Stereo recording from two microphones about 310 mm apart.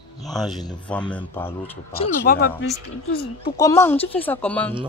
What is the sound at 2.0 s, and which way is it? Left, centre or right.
Speech, left.